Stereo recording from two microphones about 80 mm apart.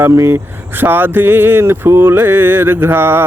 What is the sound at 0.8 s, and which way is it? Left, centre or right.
Mantra, right.